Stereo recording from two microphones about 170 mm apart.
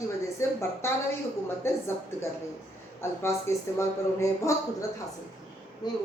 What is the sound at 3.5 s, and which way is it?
A woman's voice, 15° left (ahead or behind).